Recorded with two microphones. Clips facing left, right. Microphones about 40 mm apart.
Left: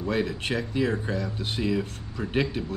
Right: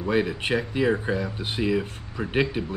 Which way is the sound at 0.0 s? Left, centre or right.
Centre.